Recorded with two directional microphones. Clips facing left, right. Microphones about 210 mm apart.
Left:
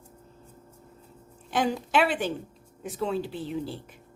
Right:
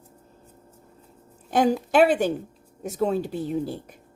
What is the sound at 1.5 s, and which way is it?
A woman's voice, 40° right (ahead or behind).